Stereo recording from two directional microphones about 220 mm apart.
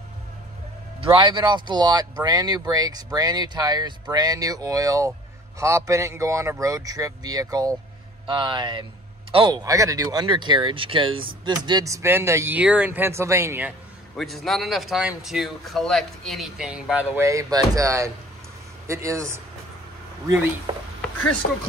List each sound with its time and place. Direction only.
1.2 s speech: 20° right (ahead or behind)